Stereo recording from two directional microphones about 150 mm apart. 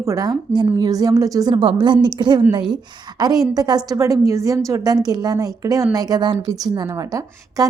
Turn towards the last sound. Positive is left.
turn(degrees=-25)  # may be behind; listen again after turning